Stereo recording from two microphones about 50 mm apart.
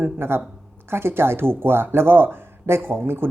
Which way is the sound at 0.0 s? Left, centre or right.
Right.